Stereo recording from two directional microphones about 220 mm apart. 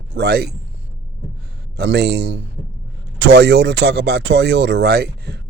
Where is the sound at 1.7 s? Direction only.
50° right (ahead or behind).